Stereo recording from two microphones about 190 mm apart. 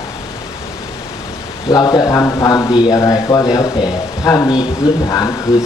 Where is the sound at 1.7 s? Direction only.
20° left (ahead or behind).